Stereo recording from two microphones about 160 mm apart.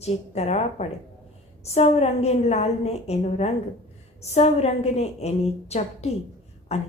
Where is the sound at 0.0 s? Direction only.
40° left (ahead or behind).